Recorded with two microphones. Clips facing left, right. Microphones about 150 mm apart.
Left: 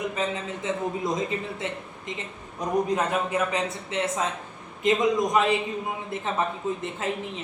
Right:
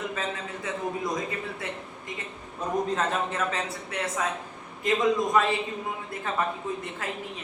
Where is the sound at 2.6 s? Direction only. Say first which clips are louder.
Left 3 dB; 15° left (ahead or behind).